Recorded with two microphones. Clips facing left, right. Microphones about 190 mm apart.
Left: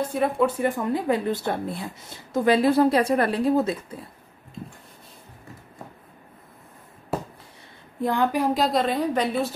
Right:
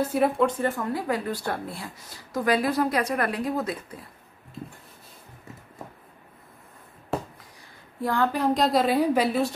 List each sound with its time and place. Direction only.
0.0 s a woman's voice: 5° right (ahead or behind)
0.5 s speech: 15° left (ahead or behind)
8.0 s a woman's voice: 20° left (ahead or behind)
8.5 s a woman's voice: centre (ahead or behind)